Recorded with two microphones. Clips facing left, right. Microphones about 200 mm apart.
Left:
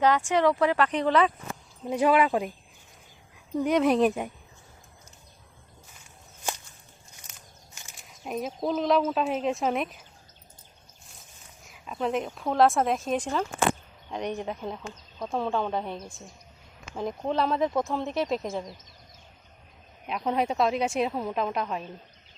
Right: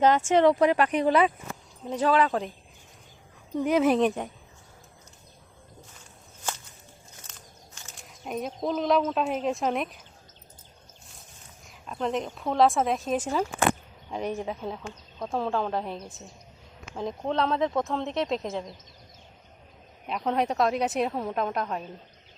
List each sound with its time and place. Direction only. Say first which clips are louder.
0.0 s speech: right 3 dB; 20° right (ahead or behind)
1.9 s speech: left 1 dB; 10° left (ahead or behind)
3.5 s speech: even; centre (ahead or behind)
7.3 s walk: right 2 dB; 10° left (ahead or behind)
7.8 s speech: right 1 dB; 5° left (ahead or behind)
11.6 s speech: left 1 dB; centre (ahead or behind)
20.1 s speech: even; centre (ahead or behind)